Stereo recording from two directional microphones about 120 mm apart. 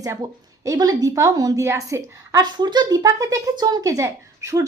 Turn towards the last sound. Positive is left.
turn(degrees=-25)  # may be behind; listen again after turning